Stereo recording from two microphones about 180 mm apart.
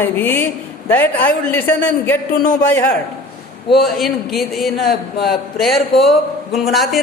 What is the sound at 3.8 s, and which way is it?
A woman's voice, centre (ahead or behind).